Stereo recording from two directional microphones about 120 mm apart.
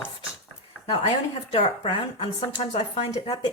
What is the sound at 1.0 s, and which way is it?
A woman's voice, 50° left (ahead or behind).